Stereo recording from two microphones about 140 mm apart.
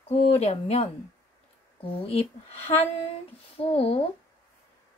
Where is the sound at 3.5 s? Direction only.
45° left (ahead or behind).